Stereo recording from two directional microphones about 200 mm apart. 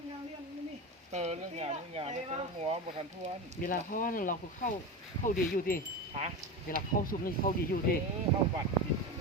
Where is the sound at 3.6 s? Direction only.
45° left (ahead or behind).